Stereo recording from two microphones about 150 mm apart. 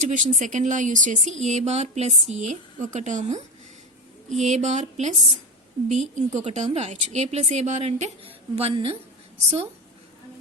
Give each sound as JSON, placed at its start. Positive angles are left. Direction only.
{"t": 0.0, "sound": "a woman's voice", "side_deg": -55}